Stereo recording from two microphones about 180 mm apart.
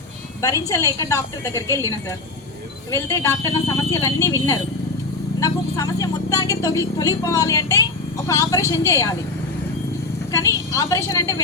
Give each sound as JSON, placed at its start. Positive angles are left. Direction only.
{"t": 0.4, "sound": "a woman's voice", "side_deg": 20}
{"t": 10.3, "sound": "speech", "side_deg": 20}